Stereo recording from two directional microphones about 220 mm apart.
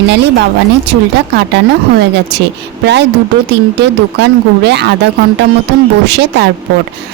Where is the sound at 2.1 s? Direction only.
50° right (ahead or behind).